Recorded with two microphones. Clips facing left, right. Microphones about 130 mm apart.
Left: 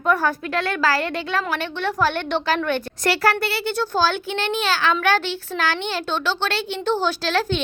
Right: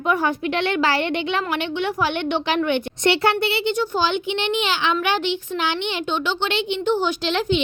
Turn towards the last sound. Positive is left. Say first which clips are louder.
# right 1 dB
turn(degrees=-15)  # may be behind; listen again after turning